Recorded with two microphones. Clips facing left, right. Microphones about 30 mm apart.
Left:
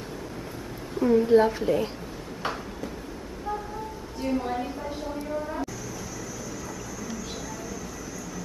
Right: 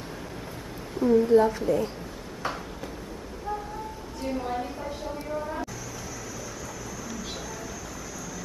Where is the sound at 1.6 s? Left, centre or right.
Left.